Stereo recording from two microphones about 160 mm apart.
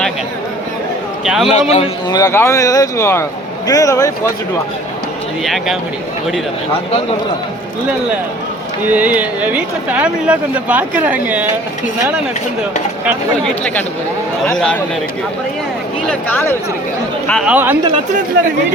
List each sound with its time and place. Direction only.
1.2 s a man's voice: centre (ahead or behind)
1.5 s a man's voice: 40° left (ahead or behind)
2.0 s speech: 20° left (ahead or behind)
8.9 s speech: 10° right (ahead or behind)
14.4 s a man's voice: 5° left (ahead or behind)
16.0 s speech: 15° left (ahead or behind)
17.4 s speech: 10° right (ahead or behind)